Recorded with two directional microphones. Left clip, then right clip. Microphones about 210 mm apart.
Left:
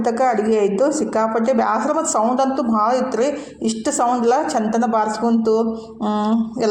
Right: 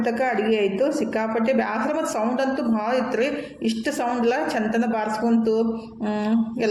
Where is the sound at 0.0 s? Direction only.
15° left (ahead or behind).